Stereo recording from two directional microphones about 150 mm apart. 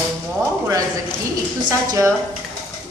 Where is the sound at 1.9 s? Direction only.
20° right (ahead or behind).